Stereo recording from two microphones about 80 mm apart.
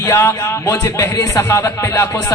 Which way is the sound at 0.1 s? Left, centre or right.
Left.